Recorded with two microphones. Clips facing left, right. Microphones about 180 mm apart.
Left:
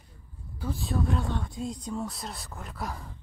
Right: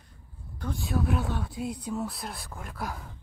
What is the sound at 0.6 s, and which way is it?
Speech, centre (ahead or behind).